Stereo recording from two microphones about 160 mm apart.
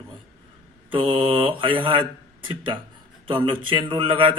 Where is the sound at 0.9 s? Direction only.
35° right (ahead or behind).